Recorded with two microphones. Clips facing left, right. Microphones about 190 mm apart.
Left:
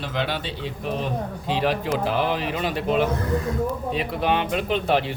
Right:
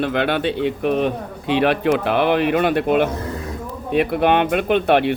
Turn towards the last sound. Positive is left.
turn(degrees=-65)  # may be behind; listen again after turning